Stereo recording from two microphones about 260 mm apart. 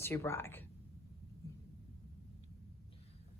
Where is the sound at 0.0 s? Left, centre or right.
Centre.